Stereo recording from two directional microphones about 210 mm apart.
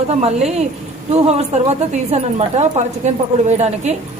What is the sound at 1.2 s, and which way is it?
Speech, 30° right (ahead or behind).